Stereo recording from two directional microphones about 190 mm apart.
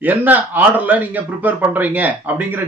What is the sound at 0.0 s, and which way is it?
A man's voice, 10° right (ahead or behind).